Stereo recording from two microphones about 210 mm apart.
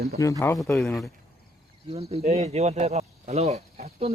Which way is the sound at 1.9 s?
30° right (ahead or behind).